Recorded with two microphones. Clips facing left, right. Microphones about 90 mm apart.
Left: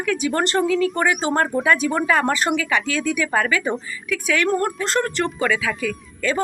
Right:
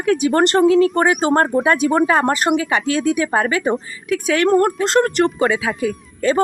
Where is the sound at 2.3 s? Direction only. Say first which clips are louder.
Right 4 dB; 20° right (ahead or behind).